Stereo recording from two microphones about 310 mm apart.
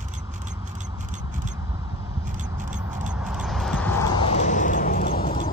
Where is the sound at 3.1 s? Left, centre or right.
Centre; by 5.3 s left.